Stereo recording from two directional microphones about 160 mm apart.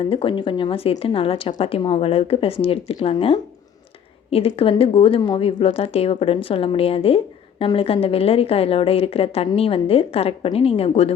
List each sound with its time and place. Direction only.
0.0 s a woman's voice: 35° left (ahead or behind)